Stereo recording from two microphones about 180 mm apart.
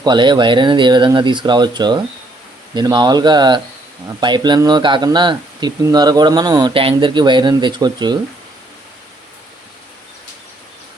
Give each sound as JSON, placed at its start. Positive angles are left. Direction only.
{"t": 0.0, "sound": "speech", "side_deg": -25}